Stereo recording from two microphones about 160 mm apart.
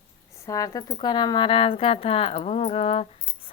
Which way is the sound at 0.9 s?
30° left (ahead or behind).